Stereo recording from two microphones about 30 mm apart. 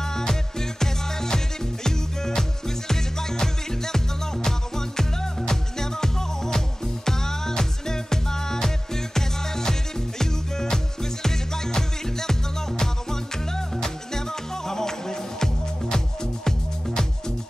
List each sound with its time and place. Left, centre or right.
0.0 s music: centre